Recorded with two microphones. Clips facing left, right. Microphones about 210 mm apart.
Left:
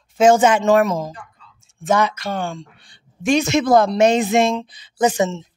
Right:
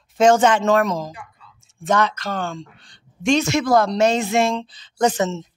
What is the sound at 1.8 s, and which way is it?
Speech, 10° left (ahead or behind).